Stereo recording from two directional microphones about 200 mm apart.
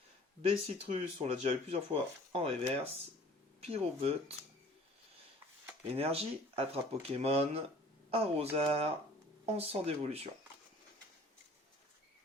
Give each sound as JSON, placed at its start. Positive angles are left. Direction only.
{"t": 0.4, "sound": "speech", "side_deg": -30}
{"t": 6.0, "sound": "speech", "side_deg": -30}